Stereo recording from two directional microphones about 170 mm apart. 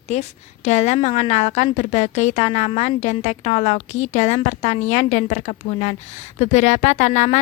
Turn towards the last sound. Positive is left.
turn(degrees=45)  # may be behind; listen again after turning